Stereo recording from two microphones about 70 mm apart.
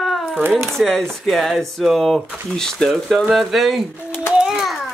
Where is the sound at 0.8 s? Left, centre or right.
Centre.